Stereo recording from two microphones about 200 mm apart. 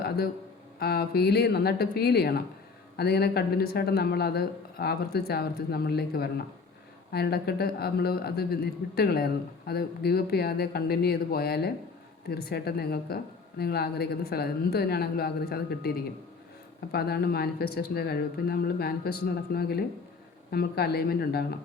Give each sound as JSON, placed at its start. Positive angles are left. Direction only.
{"t": 0.8, "sound": "speech", "side_deg": 50}